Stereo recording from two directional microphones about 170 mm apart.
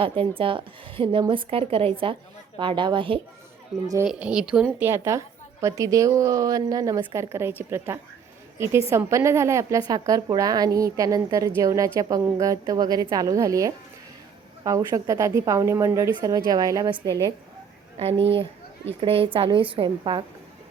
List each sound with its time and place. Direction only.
0.0 s a woman's voice: 30° right (ahead or behind)
3.8 s a woman's voice: 15° right (ahead or behind)
4.1 s a woman's voice: 5° right (ahead or behind); by 17.3 s 25° right (ahead or behind)
18.9 s a woman's voice: 35° right (ahead or behind)